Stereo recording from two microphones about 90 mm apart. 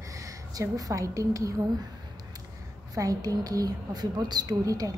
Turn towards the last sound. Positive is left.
turn(degrees=-40)  # may be behind; listen again after turning